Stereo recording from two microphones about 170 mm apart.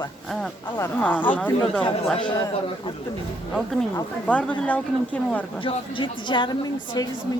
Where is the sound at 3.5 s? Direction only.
Centre (ahead or behind).